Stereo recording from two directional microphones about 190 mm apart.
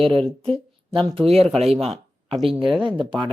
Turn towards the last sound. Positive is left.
turn(degrees=-25)  # may be behind; listen again after turning